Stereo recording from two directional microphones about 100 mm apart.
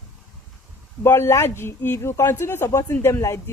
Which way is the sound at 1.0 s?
25° left (ahead or behind).